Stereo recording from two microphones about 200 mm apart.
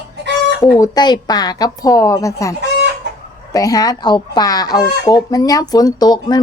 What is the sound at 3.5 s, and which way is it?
Speech, 15° left (ahead or behind).